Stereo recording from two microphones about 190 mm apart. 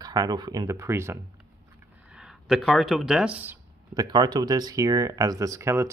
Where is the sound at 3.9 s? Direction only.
20° right (ahead or behind).